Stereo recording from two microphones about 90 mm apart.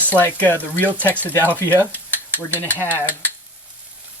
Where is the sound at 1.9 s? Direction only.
20° right (ahead or behind).